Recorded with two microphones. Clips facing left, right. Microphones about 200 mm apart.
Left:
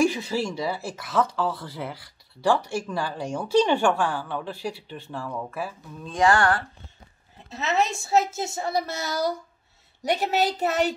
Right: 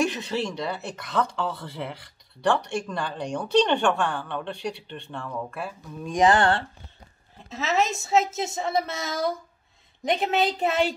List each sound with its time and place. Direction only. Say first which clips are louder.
0.0 s speech: left 3 dB; 5° left (ahead or behind)
6.0 s speech: right 1 dB; 20° right (ahead or behind)
7.4 s a woman's voice: even; centre (ahead or behind)